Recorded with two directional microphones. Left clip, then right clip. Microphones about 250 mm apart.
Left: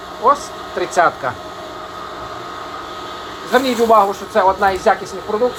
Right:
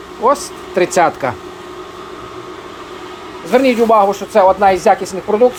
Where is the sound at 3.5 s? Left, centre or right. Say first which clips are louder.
Right 2 dB; right.